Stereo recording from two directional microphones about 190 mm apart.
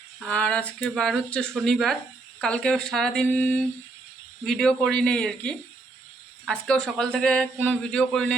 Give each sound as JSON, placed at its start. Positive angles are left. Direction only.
{"t": 0.2, "sound": "speech", "side_deg": 5}